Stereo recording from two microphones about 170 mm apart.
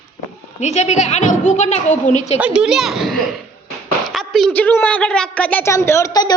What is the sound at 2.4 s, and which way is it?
A child's voice, 5° right (ahead or behind).